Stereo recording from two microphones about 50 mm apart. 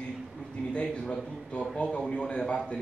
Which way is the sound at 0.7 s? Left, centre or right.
Centre.